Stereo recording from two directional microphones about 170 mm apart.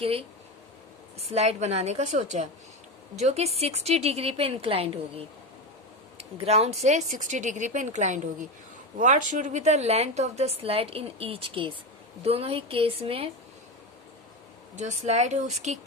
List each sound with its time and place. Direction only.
0.0 s a woman's voice: 35° right (ahead or behind)
1.3 s a woman's voice: 40° right (ahead or behind)
14.8 s a woman's voice: 45° right (ahead or behind)